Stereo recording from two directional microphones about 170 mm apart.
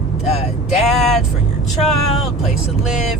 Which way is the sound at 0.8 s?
Centre (ahead or behind).